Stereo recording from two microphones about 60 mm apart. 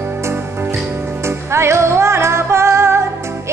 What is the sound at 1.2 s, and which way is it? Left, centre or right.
Music, right.